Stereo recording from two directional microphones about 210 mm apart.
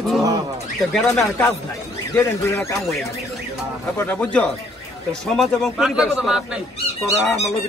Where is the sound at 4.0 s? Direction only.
5° left (ahead or behind).